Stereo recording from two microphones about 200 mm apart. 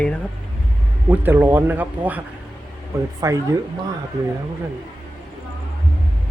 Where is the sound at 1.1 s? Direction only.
10° right (ahead or behind).